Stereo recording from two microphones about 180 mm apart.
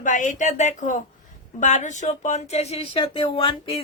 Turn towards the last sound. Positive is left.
turn(degrees=35)  # may be behind; listen again after turning